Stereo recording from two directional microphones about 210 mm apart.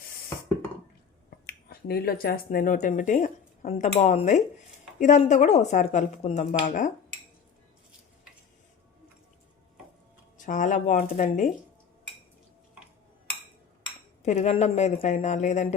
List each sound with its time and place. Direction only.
1.5 s speech: 50° left (ahead or behind)
10.3 s speech: 35° left (ahead or behind)
14.2 s speech: 30° left (ahead or behind)